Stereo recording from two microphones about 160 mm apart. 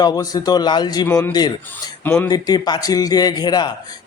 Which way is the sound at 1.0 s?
15° left (ahead or behind).